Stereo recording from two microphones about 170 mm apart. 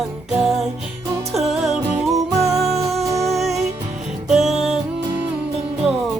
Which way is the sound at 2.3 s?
20° right (ahead or behind).